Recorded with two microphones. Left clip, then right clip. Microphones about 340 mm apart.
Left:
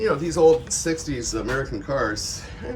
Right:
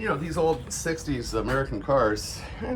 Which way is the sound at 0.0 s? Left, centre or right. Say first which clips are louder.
Left 8 dB; centre.